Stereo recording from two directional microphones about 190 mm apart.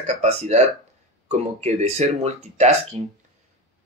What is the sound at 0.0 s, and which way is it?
Speech, 35° right (ahead or behind).